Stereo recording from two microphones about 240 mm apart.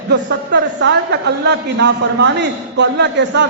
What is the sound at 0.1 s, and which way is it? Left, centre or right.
A man's voice, right.